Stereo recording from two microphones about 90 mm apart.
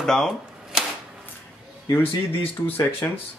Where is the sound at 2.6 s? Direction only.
20° left (ahead or behind).